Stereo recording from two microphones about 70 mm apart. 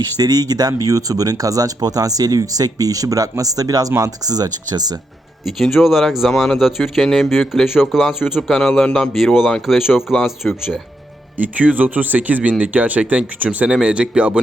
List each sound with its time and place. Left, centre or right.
0.2 s speech: right
0.8 s speech: right
5.5 s speech: centre
8.4 s a man's voice: centre
9.1 s speech: centre
10.4 s speech: centre
11.3 s speech: right